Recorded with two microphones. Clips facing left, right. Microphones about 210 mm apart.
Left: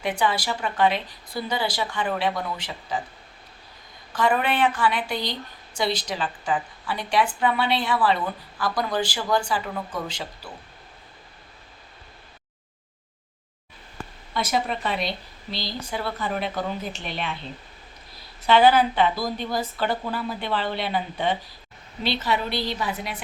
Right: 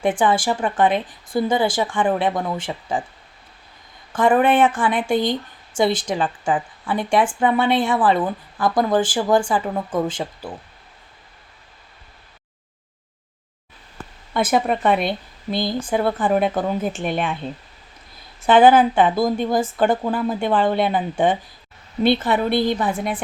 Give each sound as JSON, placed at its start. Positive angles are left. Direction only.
{"t": 0.0, "sound": "speech", "side_deg": -50}
{"t": 4.1, "sound": "speech", "side_deg": -50}
{"t": 14.3, "sound": "speech", "side_deg": -55}